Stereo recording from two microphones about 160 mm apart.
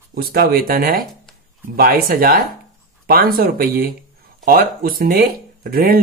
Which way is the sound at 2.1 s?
65° right (ahead or behind).